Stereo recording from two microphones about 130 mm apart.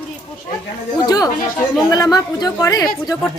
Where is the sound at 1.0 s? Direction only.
30° left (ahead or behind).